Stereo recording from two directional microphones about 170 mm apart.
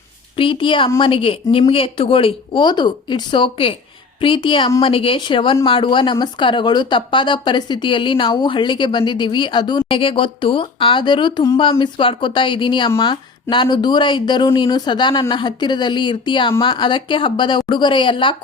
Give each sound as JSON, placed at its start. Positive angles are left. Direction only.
{"t": 0.3, "sound": "speech", "side_deg": 30}